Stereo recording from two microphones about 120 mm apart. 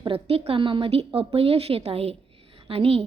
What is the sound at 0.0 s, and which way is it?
A woman's voice, 50° right (ahead or behind).